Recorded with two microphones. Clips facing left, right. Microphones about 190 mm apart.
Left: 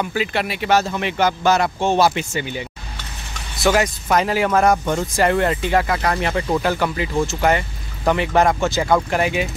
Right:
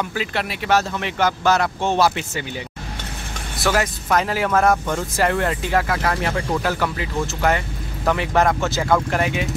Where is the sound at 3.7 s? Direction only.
Centre (ahead or behind).